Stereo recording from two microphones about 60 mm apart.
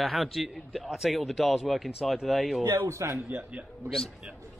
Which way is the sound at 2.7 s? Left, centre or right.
Right.